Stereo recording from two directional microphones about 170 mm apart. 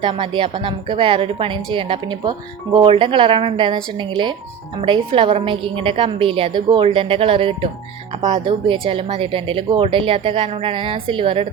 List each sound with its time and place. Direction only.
0.0 s speech: 30° right (ahead or behind)